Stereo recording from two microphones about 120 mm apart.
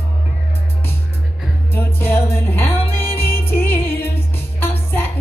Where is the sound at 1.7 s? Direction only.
20° left (ahead or behind).